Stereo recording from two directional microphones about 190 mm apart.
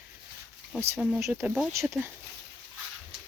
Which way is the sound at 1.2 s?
10° right (ahead or behind).